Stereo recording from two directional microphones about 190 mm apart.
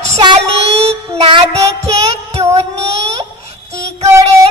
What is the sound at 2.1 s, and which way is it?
Child singing, 35° right (ahead or behind).